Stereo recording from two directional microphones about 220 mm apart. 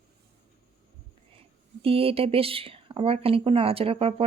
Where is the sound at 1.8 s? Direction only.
25° right (ahead or behind).